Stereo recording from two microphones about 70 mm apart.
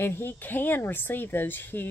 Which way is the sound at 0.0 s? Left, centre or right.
Left.